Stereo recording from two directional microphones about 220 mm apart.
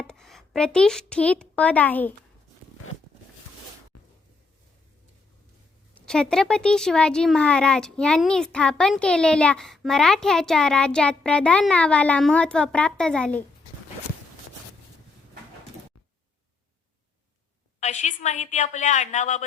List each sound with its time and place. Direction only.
0.0 s a child's voice: centre (ahead or behind)
5.9 s speech: 5° left (ahead or behind)
17.7 s a woman's voice: 30° left (ahead or behind)